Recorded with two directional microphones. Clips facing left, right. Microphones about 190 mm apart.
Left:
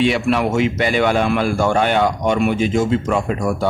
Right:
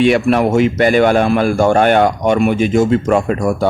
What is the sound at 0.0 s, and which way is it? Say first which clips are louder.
A man's voice: right 5 dB; 50° right (ahead or behind).